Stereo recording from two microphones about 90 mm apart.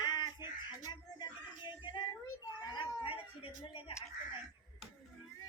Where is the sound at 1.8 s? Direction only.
65° left (ahead or behind).